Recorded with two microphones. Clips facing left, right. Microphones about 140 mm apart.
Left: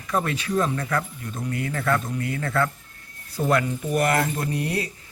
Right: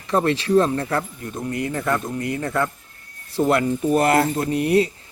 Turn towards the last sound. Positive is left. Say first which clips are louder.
# right 8 dB
turn(degrees=-25)  # may be behind; listen again after turning